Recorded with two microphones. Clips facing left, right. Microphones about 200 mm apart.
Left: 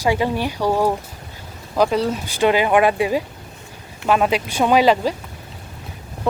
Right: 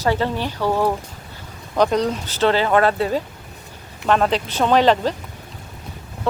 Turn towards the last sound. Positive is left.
turn(degrees=10)  # may be behind; listen again after turning